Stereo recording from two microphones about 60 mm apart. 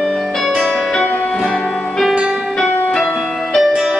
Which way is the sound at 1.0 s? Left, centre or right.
Left.